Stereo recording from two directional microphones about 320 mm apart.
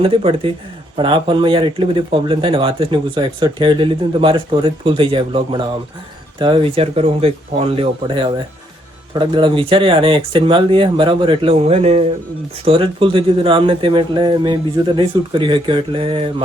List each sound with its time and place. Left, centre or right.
0.0 s speech: centre